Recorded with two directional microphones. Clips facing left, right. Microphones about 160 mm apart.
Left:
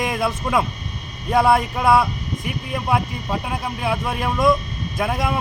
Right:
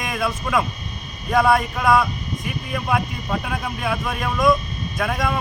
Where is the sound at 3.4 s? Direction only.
25° left (ahead or behind).